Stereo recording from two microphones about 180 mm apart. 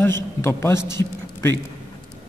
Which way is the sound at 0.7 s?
85° right.